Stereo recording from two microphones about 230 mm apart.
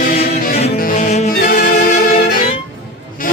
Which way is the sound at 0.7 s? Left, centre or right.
Left.